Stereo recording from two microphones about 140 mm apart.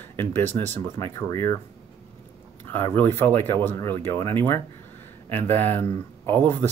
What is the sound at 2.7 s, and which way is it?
Speech, 15° left (ahead or behind).